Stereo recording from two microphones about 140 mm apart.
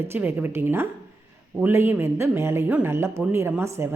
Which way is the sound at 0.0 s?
15° right (ahead or behind).